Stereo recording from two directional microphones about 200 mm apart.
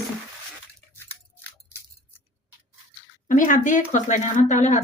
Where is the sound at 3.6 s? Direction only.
40° left (ahead or behind).